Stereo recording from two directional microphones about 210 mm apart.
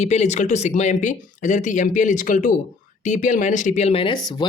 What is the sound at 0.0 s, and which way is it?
Speech, 35° left (ahead or behind).